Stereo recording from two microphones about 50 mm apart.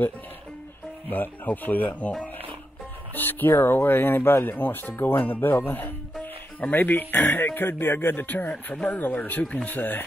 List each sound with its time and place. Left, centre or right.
1.1 s speech: left
3.2 s speech: left